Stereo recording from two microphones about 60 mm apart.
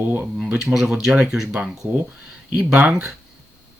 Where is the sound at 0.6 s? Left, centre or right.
Centre.